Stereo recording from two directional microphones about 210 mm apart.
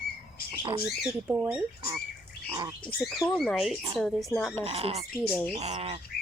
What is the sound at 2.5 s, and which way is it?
Bird, 20° right (ahead or behind).